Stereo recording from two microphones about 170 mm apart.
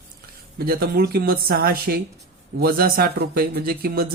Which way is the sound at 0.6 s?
65° right (ahead or behind).